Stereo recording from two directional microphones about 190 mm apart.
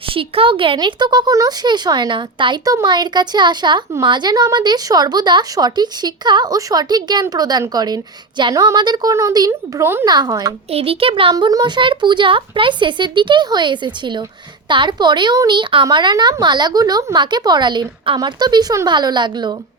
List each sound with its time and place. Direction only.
0.1 s speech: 30° right (ahead or behind)
10.7 s speech: 30° right (ahead or behind)